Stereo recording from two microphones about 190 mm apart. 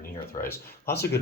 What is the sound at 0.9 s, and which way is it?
Speech, 60° left (ahead or behind).